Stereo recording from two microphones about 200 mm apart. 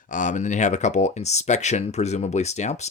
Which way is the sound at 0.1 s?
40° left (ahead or behind).